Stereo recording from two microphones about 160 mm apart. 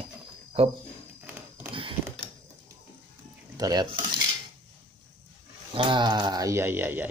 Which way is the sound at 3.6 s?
25° right (ahead or behind).